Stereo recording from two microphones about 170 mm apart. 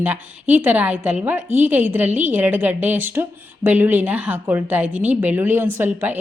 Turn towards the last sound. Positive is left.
turn(degrees=-10)  # may be behind; listen again after turning